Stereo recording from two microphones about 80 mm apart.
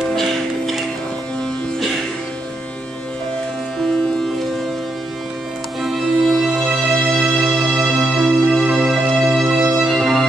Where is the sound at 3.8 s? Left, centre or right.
Centre.